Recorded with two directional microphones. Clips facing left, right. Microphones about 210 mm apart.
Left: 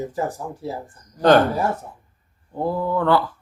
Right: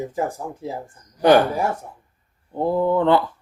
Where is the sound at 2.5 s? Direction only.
20° right (ahead or behind).